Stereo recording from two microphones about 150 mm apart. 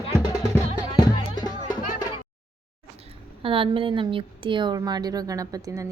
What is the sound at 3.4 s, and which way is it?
A woman's voice, 35° right (ahead or behind).